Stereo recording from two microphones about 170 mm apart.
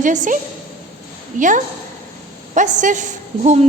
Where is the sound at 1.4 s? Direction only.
50° right (ahead or behind).